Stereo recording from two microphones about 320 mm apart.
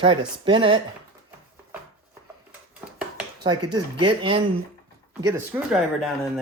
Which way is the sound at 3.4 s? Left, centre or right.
Centre.